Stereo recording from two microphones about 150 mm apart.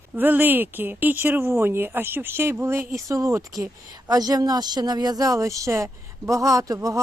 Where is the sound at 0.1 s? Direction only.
10° right (ahead or behind).